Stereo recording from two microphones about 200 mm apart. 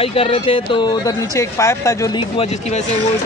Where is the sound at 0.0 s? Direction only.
30° left (ahead or behind).